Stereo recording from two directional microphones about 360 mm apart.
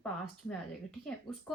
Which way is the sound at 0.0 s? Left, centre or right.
Centre.